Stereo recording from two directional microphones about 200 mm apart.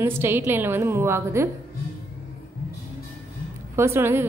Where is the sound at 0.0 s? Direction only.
10° right (ahead or behind).